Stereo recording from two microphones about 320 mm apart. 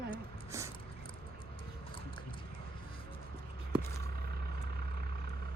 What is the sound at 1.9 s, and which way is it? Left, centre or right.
Music, centre.